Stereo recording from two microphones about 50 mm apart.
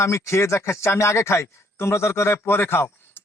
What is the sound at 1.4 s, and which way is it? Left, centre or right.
Speech, left.